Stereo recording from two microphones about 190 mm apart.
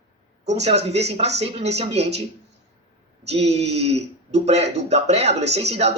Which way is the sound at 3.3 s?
35° right (ahead or behind).